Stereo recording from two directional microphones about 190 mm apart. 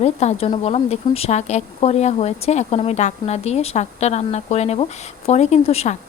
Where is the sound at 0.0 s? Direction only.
35° left (ahead or behind).